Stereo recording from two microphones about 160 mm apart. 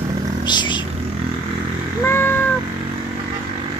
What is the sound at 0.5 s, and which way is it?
Speech, 30° left (ahead or behind).